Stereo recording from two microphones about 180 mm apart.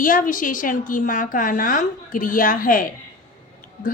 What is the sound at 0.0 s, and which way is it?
A woman's voice, 50° left (ahead or behind).